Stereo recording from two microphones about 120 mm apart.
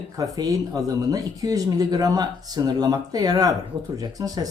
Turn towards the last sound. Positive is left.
turn(degrees=-30)  # may be behind; listen again after turning